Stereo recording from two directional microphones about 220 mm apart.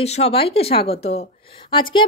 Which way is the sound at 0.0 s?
30° left (ahead or behind).